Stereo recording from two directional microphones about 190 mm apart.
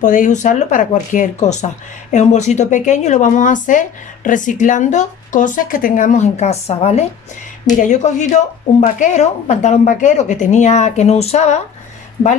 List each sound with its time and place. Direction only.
0.0 s speech: 40° left (ahead or behind)